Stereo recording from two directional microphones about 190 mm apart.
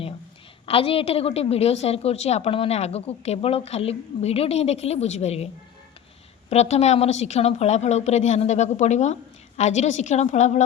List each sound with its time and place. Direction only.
0.6 s a woman's voice: 30° left (ahead or behind)
6.5 s a woman's voice: 35° left (ahead or behind)